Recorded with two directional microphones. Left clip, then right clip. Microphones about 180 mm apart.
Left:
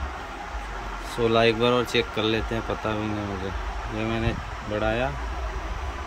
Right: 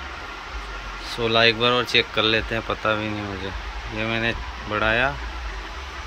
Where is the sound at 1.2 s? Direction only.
10° left (ahead or behind).